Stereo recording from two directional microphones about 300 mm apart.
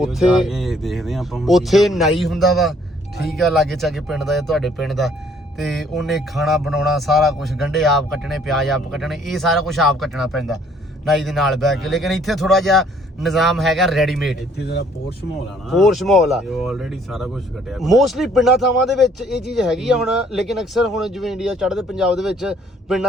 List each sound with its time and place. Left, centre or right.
0.0 s speech: centre
15.7 s speech: centre